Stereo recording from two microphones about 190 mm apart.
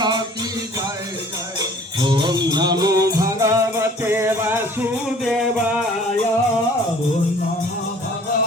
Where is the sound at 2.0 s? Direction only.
25° right (ahead or behind).